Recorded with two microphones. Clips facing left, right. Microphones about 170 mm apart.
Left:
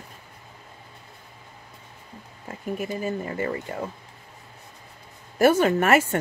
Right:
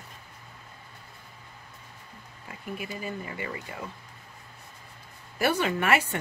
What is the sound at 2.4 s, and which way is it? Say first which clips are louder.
Speech: left 7 dB; 45° left (ahead or behind).